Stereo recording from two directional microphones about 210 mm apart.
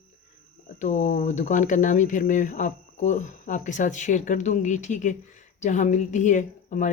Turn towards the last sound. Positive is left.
turn(degrees=35)  # may be behind; listen again after turning